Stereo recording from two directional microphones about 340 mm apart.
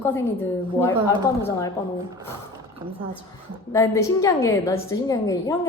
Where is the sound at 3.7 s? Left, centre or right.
Centre.